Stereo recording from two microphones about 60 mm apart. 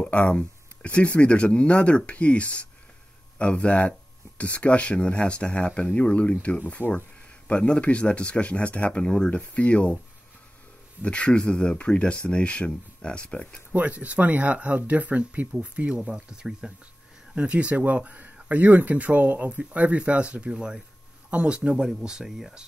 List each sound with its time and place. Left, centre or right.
0.0 s speech: centre
11.0 s speech: centre
13.7 s speech: right; by 22.5 s centre